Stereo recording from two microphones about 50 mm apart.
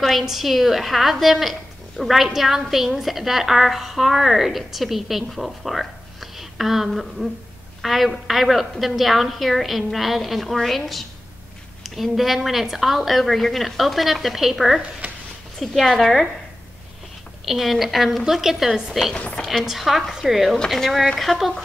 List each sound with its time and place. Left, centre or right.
0.2 s a woman's voice: centre
15.0 s a sound: right
15.6 s a woman's voice: centre
17.5 s a woman's voice: centre
19.1 s speech: left
19.6 s a woman's voice: centre